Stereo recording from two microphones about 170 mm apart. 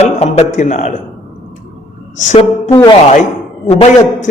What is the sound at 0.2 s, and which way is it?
Speech, 40° left (ahead or behind).